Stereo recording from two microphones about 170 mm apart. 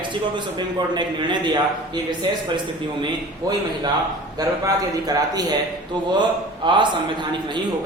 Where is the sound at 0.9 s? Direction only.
25° right (ahead or behind).